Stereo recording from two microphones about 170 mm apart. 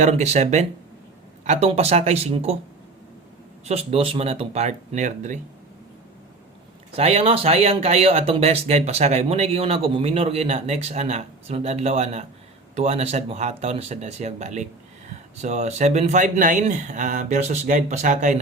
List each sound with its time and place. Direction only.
0.0 s a man's voice: 40° right (ahead or behind)
3.7 s speech: 35° right (ahead or behind)
6.9 s a man's voice: 40° right (ahead or behind)